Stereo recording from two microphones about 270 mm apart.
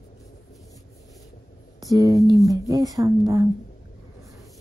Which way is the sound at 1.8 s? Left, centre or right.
Centre.